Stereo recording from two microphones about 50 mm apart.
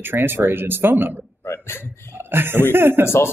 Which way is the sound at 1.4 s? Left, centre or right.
Left.